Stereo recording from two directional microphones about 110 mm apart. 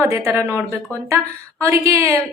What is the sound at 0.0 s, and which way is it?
Speech, 25° right (ahead or behind).